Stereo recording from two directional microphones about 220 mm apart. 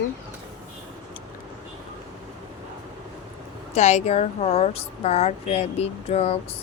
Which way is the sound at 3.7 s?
30° left (ahead or behind).